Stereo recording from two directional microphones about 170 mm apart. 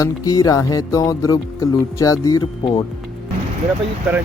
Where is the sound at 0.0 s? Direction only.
20° left (ahead or behind).